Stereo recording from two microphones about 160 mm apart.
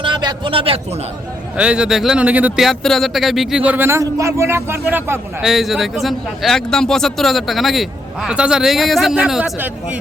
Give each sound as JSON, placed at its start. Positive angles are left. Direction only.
{"t": 0.0, "sound": "a man's voice", "side_deg": -30}
{"t": 1.5, "sound": "speech", "side_deg": -5}
{"t": 5.4, "sound": "a man's voice", "side_deg": 0}